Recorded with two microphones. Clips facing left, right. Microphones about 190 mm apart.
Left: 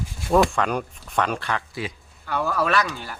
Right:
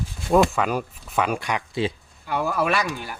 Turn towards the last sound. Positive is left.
turn(degrees=-10)  # may be behind; listen again after turning